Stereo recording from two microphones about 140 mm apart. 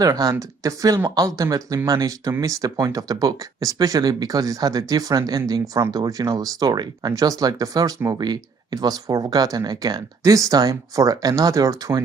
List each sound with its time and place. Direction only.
0.0 s speech: 25° right (ahead or behind)